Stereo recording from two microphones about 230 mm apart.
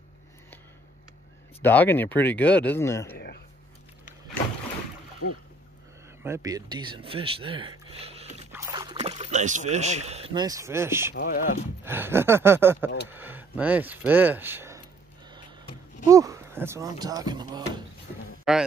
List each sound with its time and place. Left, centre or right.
1.6 s speech: centre
3.1 s speech: left
6.2 s speech: centre
8.5 s speech: centre
11.1 s speech: left
11.8 s speech: centre
16.1 s speech: centre
18.5 s a man's voice: centre